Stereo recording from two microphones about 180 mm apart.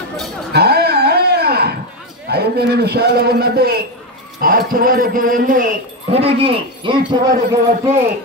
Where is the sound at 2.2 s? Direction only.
60° right (ahead or behind).